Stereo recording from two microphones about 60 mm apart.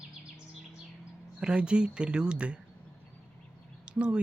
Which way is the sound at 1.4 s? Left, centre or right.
Centre.